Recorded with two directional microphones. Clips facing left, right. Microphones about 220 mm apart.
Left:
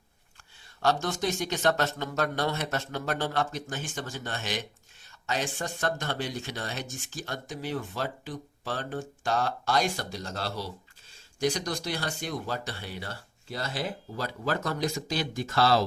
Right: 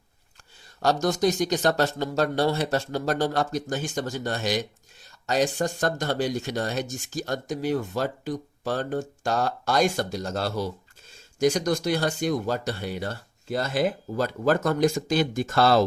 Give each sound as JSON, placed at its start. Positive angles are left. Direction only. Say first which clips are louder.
{"t": 0.8, "sound": "speech", "louder": "right 5 dB", "side_deg": -40}